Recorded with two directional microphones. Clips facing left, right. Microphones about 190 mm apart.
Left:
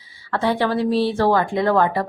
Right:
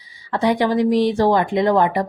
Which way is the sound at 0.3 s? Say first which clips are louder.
Right 2 dB; 15° right (ahead or behind).